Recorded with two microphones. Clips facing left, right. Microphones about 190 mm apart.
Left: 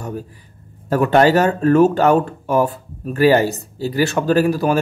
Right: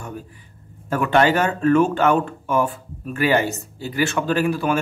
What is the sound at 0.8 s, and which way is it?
A man's voice, 35° left (ahead or behind).